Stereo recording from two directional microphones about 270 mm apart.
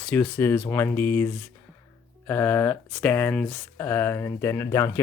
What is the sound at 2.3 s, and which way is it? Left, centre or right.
Speech, centre.